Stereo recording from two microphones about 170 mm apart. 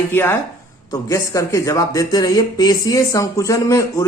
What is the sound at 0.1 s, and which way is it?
Speech, 15° left (ahead or behind).